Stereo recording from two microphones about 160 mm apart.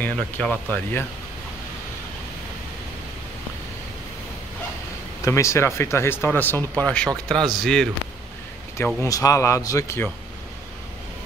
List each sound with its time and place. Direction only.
0.0 s speech: 10° left (ahead or behind)
5.2 s speech: 20° left (ahead or behind)
8.7 s speech: 20° left (ahead or behind)